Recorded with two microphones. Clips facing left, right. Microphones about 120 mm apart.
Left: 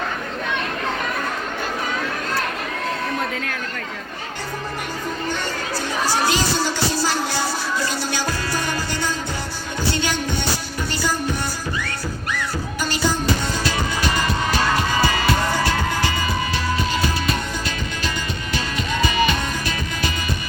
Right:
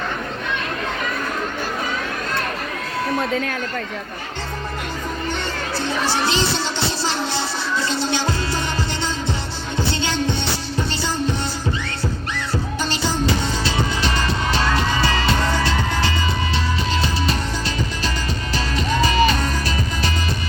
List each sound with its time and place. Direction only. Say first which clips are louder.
5.7 s music: right 1 dB; 25° right (ahead or behind)
18.5 s music: right 3 dB; 30° right (ahead or behind)